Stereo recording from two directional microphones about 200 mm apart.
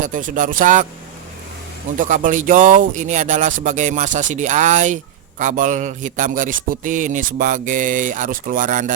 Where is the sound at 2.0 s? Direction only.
40° right (ahead or behind).